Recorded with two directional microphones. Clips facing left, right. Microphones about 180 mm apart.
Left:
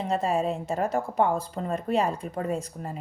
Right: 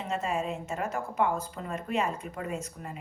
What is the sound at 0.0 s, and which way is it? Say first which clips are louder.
A woman's voice: left 6 dB; 35° left (ahead or behind).